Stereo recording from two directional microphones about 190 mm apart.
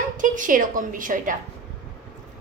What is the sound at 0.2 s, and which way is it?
A woman's voice, 45° right (ahead or behind).